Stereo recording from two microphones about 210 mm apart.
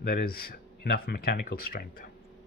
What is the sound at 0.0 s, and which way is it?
Speech, 45° left (ahead or behind).